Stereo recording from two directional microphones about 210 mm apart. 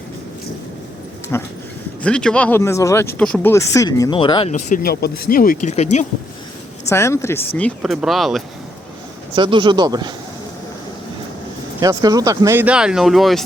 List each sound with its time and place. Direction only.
1.3 s speech: 10° left (ahead or behind)
4.5 s speech: 40° left (ahead or behind)
6.8 s speech: 15° left (ahead or behind)
9.3 s speech: 25° right (ahead or behind)
11.8 s speech: 20° right (ahead or behind); by 13.4 s centre (ahead or behind)